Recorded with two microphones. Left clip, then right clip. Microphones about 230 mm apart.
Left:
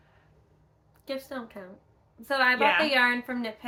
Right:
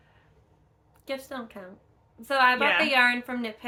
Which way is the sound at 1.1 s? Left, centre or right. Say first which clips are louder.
Right 1 dB; centre.